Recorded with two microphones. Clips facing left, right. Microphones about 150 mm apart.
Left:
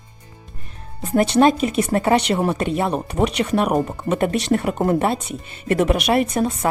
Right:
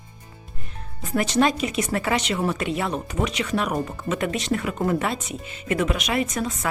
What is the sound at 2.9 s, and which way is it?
Speech, 60° left (ahead or behind).